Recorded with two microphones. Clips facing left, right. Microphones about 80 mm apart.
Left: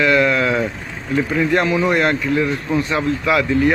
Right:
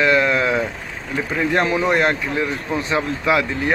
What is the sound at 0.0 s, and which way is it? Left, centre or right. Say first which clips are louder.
Vehicle: left 1 dB; right.